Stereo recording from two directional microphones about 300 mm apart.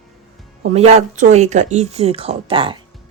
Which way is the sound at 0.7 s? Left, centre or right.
Right.